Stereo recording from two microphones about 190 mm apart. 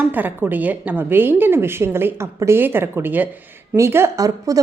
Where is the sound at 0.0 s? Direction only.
10° right (ahead or behind).